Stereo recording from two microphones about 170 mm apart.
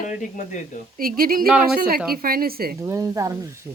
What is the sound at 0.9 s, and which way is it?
A woman's voice, 60° right (ahead or behind).